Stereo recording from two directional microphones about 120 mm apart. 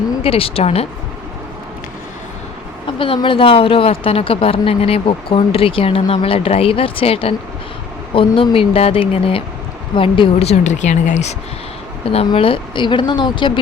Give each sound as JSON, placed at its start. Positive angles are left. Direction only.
{"t": 0.2, "sound": "speech", "side_deg": 50}
{"t": 2.8, "sound": "speech", "side_deg": 50}
{"t": 12.1, "sound": "speech", "side_deg": 50}